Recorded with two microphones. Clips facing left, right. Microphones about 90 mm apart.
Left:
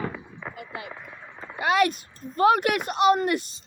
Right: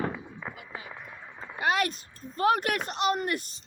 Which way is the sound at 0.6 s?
75° left (ahead or behind).